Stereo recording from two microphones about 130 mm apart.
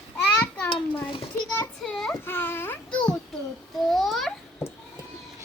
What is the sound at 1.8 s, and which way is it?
Child singing, 5° left (ahead or behind).